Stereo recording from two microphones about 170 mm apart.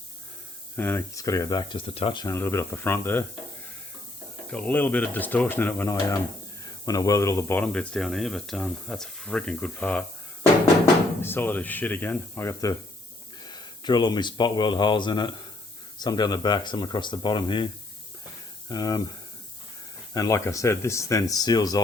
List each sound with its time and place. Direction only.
0.8 s speech: 15° left (ahead or behind); by 2.2 s 30° left (ahead or behind)
2.2 s speech: 15° left (ahead or behind)
4.5 s speech: 10° left (ahead or behind)
11.2 s speech: 10° left (ahead or behind)
18.7 s speech: 20° left (ahead or behind)
20.1 s speech: 20° left (ahead or behind)